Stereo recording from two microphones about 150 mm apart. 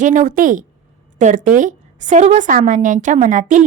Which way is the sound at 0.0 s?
60° right (ahead or behind).